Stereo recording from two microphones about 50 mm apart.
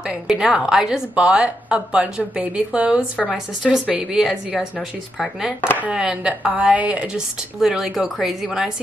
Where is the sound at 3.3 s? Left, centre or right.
Centre.